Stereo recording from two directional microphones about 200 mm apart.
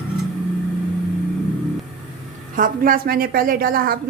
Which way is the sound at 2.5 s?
45° right (ahead or behind).